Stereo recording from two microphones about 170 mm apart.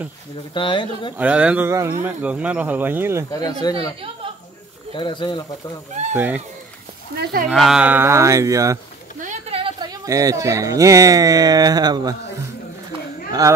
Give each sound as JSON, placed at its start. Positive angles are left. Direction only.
{"t": 0.6, "sound": "speech", "side_deg": 30}
{"t": 1.1, "sound": "speech", "side_deg": -5}
{"t": 3.3, "sound": "speech", "side_deg": 20}
{"t": 4.9, "sound": "speech", "side_deg": 30}
{"t": 6.1, "sound": "speech", "side_deg": -10}
{"t": 7.1, "sound": "speech", "side_deg": -60}
{"t": 7.4, "sound": "speech", "side_deg": 0}
{"t": 9.2, "sound": "a sound", "side_deg": -45}
{"t": 9.6, "sound": "speech", "side_deg": -30}